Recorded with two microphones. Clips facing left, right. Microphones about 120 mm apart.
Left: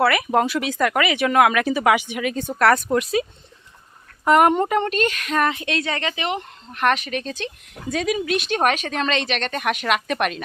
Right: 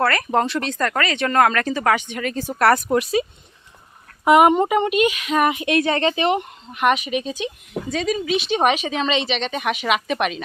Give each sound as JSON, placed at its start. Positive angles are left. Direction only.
{"t": 0.0, "sound": "a woman's voice", "side_deg": 5}
{"t": 4.3, "sound": "speech", "side_deg": -5}
{"t": 6.7, "sound": "speech", "side_deg": -5}
{"t": 7.9, "sound": "a woman's voice", "side_deg": 5}